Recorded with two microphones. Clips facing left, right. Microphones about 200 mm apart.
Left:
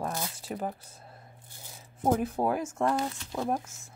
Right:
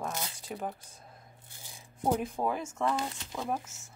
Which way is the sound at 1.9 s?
5° left (ahead or behind).